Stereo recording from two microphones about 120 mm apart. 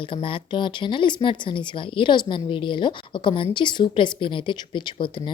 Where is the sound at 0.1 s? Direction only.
45° left (ahead or behind).